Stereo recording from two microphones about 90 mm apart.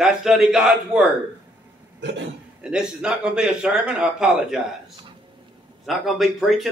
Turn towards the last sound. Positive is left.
turn(degrees=0)  # may be behind; listen again after turning